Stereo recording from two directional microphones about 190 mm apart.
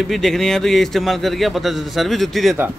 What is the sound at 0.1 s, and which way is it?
A man's voice, centre (ahead or behind).